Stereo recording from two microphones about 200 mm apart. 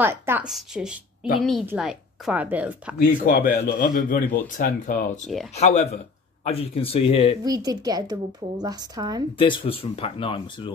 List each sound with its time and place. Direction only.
0.0 s a woman's voice: 10° right (ahead or behind)
3.3 s speech: 45° left (ahead or behind); by 7.3 s 30° left (ahead or behind)
7.4 s a woman's voice: 20° right (ahead or behind)
9.4 s speech: 25° left (ahead or behind)